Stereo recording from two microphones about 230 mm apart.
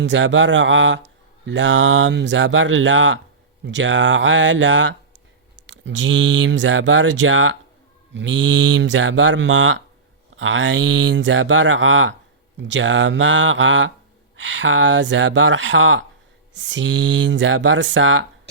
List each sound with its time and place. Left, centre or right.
0.0 s speech: right